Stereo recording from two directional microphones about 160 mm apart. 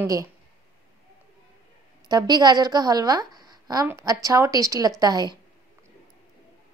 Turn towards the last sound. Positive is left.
turn(degrees=-25)  # may be behind; listen again after turning